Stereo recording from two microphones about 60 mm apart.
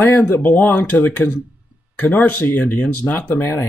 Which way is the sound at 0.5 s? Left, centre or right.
Left.